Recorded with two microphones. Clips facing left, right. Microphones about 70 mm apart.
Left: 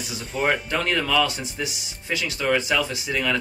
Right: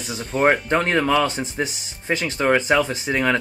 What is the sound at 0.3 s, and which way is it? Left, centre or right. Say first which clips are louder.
Speech: right 6 dB; right.